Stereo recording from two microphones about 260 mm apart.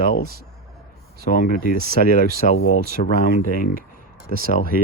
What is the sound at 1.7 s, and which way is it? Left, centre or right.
Speech, right.